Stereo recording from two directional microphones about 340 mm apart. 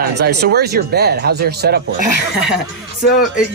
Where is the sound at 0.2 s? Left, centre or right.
Right.